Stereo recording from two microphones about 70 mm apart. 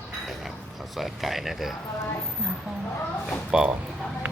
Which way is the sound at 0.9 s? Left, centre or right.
Centre.